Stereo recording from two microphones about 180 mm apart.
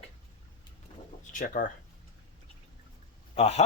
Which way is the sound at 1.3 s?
50° left (ahead or behind).